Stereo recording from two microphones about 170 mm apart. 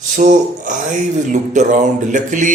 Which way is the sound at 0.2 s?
50° right (ahead or behind).